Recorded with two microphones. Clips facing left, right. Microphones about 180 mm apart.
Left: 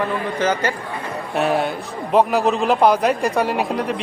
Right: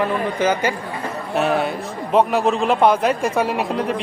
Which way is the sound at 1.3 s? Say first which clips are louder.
Even; centre (ahead or behind).